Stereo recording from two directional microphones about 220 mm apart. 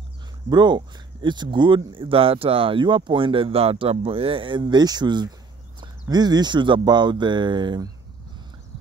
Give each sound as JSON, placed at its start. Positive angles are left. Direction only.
{"t": 0.5, "sound": "speech", "side_deg": -20}